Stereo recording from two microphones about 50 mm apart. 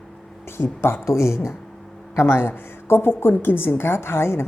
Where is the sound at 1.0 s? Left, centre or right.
Left.